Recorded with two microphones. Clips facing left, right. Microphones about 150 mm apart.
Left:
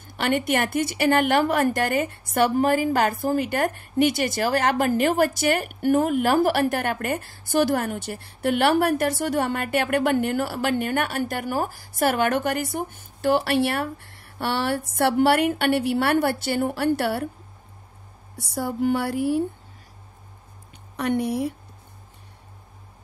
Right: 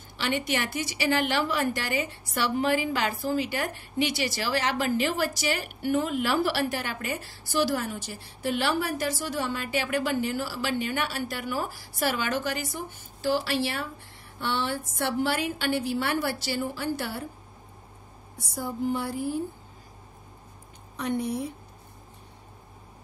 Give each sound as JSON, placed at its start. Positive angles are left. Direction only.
{"t": 0.2, "sound": "a woman's voice", "side_deg": 55}
{"t": 18.4, "sound": "speech", "side_deg": 70}
{"t": 20.9, "sound": "speech", "side_deg": 65}